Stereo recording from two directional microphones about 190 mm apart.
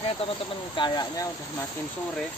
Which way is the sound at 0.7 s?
20° left (ahead or behind).